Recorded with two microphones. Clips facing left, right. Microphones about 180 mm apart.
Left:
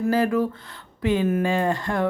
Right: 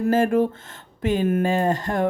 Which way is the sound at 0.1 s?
50° right (ahead or behind).